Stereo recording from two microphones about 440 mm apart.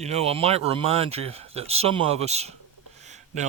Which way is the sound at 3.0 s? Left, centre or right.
Centre.